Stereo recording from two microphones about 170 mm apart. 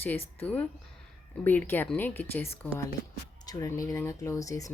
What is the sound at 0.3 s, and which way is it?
Speech, 10° left (ahead or behind).